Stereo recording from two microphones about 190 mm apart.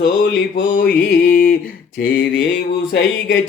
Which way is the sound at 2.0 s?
70° left (ahead or behind).